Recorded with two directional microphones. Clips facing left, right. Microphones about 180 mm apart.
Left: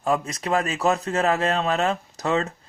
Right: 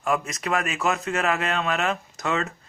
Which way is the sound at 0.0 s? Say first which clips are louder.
Left 2 dB; 30° left (ahead or behind).